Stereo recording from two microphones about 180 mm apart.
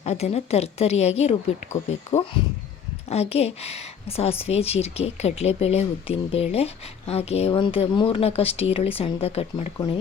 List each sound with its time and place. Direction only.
0.0 s speech: 35° left (ahead or behind)
3.1 s speech: 35° left (ahead or behind)